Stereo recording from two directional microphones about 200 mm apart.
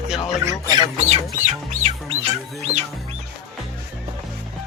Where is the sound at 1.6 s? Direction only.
35° right (ahead or behind).